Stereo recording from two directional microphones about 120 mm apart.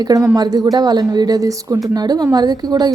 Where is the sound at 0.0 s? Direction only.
30° right (ahead or behind).